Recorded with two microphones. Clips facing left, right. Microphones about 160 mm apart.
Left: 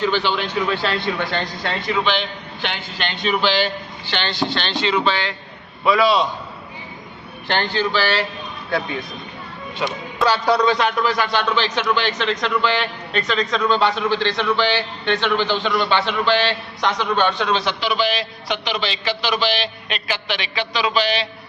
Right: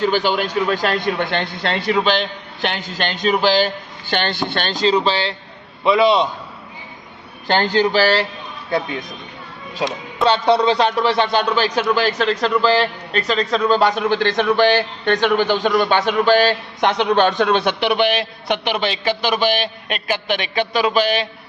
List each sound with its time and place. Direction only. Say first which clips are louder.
0.0 s a man's voice: right 3 dB; 45° right (ahead or behind)
2.6 s a man's voice: right 5 dB; 40° right (ahead or behind); by 6.2 s 20° right (ahead or behind)
7.9 s a man's voice: right 4 dB; 40° right (ahead or behind)
10.2 s a man's voice: right 2 dB; 25° right (ahead or behind)
11.5 s a man's voice: right 3 dB; 40° right (ahead or behind)
17.1 s a man's voice: right 4 dB; 40° right (ahead or behind)